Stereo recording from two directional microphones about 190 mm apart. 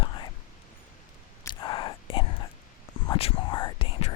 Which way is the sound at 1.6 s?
25° left (ahead or behind).